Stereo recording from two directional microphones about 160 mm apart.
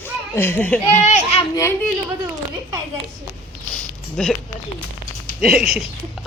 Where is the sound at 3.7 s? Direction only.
5° left (ahead or behind).